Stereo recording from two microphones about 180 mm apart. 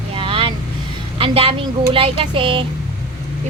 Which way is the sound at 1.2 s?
30° right (ahead or behind).